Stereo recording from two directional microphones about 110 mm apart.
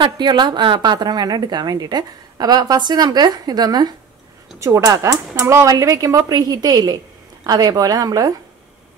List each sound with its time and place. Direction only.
0.0 s a woman's voice: 40° right (ahead or behind)